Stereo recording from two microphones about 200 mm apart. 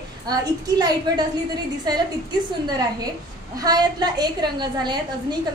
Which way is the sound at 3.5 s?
20° right (ahead or behind).